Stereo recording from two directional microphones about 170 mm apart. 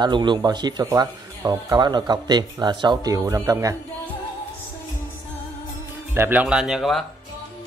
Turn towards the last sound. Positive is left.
turn(degrees=0)  # may be behind; listen again after turning